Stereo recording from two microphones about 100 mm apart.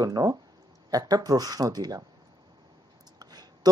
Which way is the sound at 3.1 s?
40° right (ahead or behind).